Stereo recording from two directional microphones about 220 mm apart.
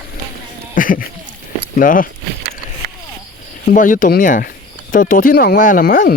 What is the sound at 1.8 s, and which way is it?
Speech, 40° left (ahead or behind).